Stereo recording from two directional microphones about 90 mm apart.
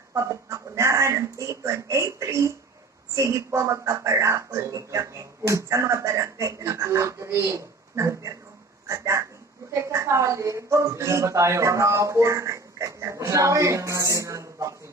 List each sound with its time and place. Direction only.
0.1 s speech: 35° right (ahead or behind)